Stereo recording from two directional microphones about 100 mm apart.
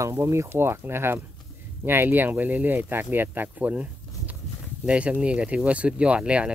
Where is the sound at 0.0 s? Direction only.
30° right (ahead or behind).